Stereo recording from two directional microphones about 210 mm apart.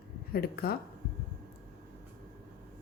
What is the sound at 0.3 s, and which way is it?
Speech, 45° left (ahead or behind).